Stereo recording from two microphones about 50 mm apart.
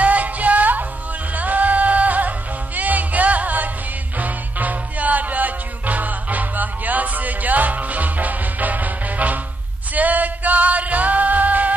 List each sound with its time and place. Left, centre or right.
0.0 s music: right